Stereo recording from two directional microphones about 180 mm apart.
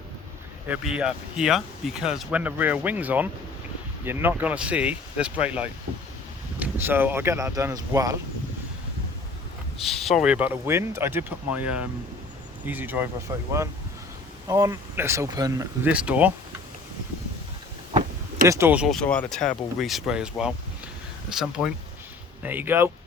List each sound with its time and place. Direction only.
0.7 s speech: 5° right (ahead or behind)
9.8 s speech: centre (ahead or behind); by 15.9 s 20° right (ahead or behind)
15.9 s speech: 5° right (ahead or behind)
18.4 s speech: 15° right (ahead or behind)
21.3 s speech: 5° right (ahead or behind)